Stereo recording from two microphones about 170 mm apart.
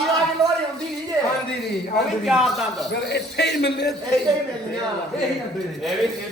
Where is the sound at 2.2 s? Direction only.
Centre (ahead or behind).